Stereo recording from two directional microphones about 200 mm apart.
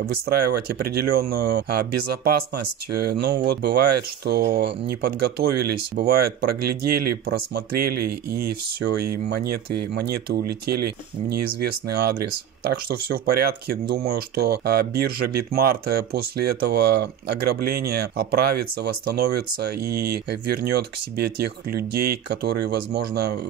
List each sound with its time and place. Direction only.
0.3 s speech: 50° right (ahead or behind)